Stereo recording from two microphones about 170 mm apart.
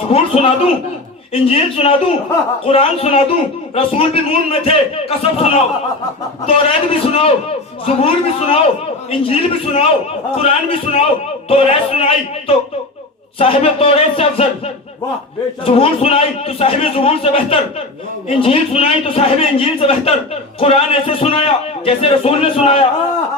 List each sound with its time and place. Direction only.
0.1 s a man's voice: 35° left (ahead or behind)